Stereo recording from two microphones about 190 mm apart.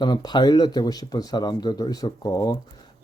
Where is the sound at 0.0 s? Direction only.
20° left (ahead or behind).